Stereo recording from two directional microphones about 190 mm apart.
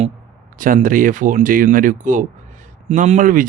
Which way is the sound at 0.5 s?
45° right (ahead or behind).